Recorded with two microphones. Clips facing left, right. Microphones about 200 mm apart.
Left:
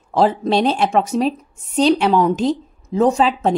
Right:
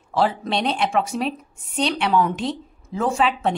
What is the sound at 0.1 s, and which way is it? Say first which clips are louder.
A woman's voice: left 6 dB; 40° left (ahead or behind).